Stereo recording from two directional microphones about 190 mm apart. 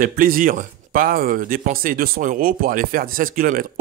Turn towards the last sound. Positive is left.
turn(degrees=-45)  # may be behind; listen again after turning